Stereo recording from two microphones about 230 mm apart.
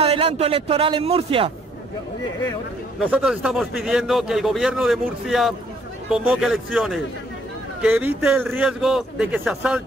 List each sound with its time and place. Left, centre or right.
0.0 s speech: right
3.0 s a man's voice: centre